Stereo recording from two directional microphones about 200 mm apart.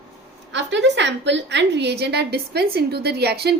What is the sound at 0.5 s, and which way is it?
A woman's voice, 60° right (ahead or behind).